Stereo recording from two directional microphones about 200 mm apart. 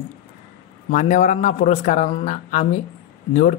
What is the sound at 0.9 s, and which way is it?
Speech, 40° left (ahead or behind).